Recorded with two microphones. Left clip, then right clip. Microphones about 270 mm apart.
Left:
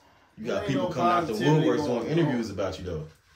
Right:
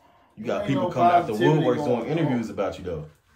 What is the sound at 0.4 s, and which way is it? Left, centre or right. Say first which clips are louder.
Speech: right 3 dB; centre.